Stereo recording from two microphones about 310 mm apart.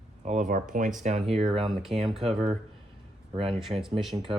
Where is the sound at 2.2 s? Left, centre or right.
Centre.